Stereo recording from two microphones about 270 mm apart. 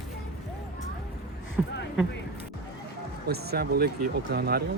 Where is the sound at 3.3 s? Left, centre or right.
Right.